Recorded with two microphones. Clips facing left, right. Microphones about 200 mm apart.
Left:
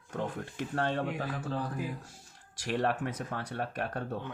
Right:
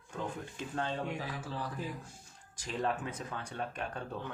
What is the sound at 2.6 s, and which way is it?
Speech, 70° left (ahead or behind).